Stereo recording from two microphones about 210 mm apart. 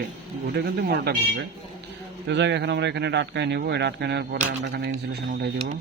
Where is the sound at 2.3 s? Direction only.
55° right (ahead or behind).